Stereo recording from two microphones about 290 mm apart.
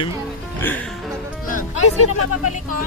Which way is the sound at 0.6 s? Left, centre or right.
Centre.